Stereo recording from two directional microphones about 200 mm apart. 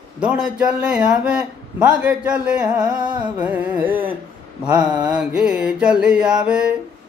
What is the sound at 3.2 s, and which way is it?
Carnatic music, 10° right (ahead or behind).